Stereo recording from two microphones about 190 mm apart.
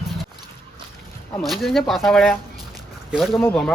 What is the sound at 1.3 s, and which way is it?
Speech, centre (ahead or behind).